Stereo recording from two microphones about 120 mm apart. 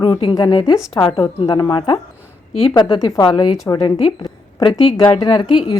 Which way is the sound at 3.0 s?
35° left (ahead or behind).